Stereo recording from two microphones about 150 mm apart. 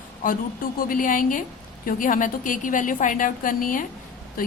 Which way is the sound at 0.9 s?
65° left (ahead or behind).